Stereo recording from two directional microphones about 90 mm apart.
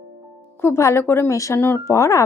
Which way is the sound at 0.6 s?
30° left (ahead or behind).